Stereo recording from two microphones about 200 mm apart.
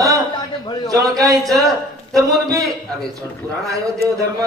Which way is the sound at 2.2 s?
15° right (ahead or behind).